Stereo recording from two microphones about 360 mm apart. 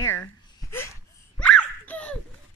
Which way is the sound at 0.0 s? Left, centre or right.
Centre.